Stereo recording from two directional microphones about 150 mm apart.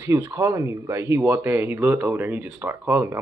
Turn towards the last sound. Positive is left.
turn(degrees=-15)  # may be behind; listen again after turning